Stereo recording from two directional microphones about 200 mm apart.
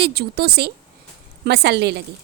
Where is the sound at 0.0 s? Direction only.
55° right (ahead or behind).